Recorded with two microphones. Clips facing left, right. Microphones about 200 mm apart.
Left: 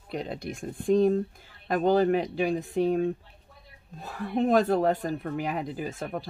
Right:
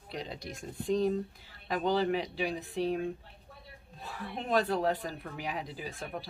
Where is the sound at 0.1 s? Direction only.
55° left (ahead or behind).